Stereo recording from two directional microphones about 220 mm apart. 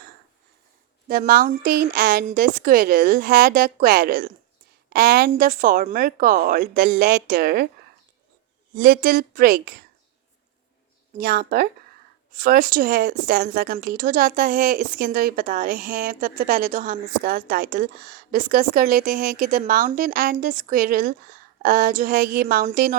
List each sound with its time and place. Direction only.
1.0 s a woman's voice: 40° right (ahead or behind)
8.7 s a woman's voice: 40° right (ahead or behind)
11.2 s a woman's voice: 45° right (ahead or behind)